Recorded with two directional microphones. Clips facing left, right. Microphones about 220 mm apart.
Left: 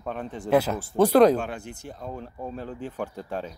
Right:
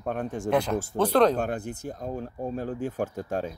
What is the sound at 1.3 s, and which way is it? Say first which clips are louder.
Speech: even; 40° right (ahead or behind).